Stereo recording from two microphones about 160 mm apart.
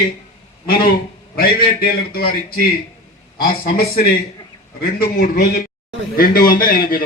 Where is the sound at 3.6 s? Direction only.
70° left (ahead or behind).